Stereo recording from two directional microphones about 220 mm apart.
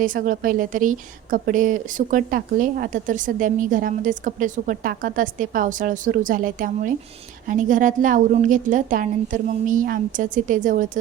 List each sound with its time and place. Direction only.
0.0 s a woman's voice: 40° right (ahead or behind)